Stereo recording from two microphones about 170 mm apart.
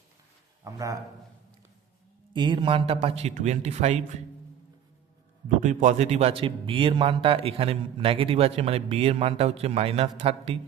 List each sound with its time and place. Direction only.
0.6 s a man's voice: 20° right (ahead or behind)
2.3 s speech: 25° right (ahead or behind)
5.5 s speech: 45° right (ahead or behind)